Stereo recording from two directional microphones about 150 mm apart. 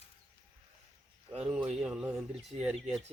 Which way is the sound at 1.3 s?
40° right (ahead or behind).